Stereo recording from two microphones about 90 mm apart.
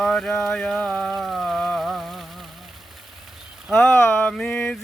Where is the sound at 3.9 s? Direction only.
25° left (ahead or behind).